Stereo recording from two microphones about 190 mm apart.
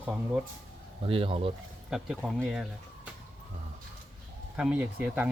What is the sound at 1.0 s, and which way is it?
Speech, 30° right (ahead or behind).